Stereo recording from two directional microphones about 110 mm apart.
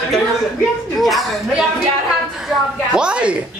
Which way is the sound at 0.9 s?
Centre (ahead or behind).